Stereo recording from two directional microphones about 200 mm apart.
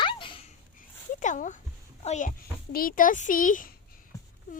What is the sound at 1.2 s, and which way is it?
Speech, 40° left (ahead or behind).